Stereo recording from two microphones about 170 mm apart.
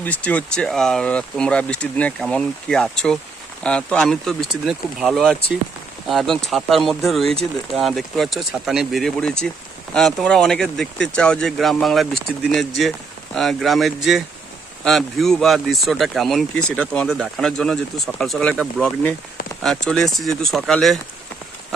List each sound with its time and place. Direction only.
0.0 s speech: 10° left (ahead or behind)